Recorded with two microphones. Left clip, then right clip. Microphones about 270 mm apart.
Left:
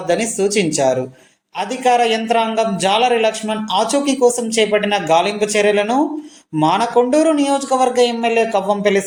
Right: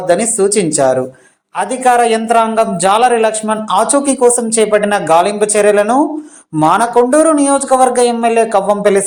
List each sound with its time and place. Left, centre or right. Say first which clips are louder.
0.2 s a woman's voice: right 5 dB; right
0.6 s a man's voice: right 4 dB; centre